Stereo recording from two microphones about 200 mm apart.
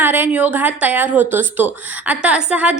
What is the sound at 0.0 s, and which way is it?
A woman's voice, 10° right (ahead or behind).